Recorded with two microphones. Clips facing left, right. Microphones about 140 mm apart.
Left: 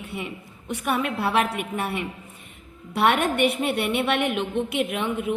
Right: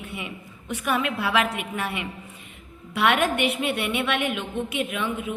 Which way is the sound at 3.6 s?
50° left (ahead or behind).